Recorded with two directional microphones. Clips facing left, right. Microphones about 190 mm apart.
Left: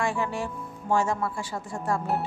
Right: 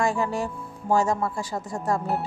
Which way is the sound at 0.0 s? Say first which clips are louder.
Right 3 dB; 40° right (ahead or behind).